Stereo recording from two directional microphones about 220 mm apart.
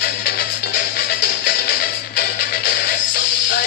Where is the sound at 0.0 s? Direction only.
45° left (ahead or behind).